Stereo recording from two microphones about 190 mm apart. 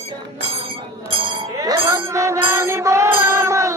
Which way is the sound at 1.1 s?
30° right (ahead or behind).